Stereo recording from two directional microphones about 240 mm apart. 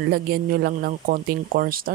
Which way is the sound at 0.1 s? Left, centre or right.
Right.